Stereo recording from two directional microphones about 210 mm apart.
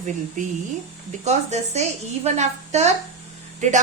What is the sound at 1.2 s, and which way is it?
Speech, 30° right (ahead or behind).